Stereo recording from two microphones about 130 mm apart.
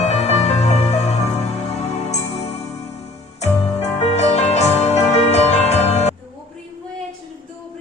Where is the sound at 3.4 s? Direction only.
60° left (ahead or behind).